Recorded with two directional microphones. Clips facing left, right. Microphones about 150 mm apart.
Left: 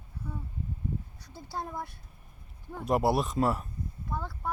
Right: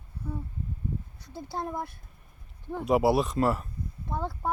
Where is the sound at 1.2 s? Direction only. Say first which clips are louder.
Right 6 dB; 20° right (ahead or behind).